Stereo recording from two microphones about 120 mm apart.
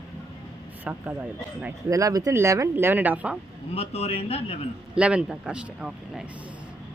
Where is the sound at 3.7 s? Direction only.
55° left (ahead or behind).